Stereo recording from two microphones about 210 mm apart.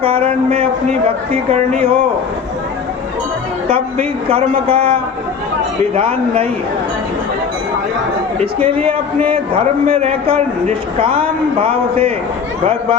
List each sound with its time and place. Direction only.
0.0 s a man's voice: 25° right (ahead or behind)
3.7 s a man's voice: 25° right (ahead or behind)
8.4 s a man's voice: 25° right (ahead or behind)